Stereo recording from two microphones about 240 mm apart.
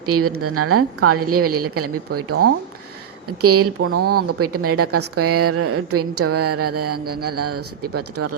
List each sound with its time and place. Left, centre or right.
0.0 s a woman's voice: right
3.4 s a woman's voice: right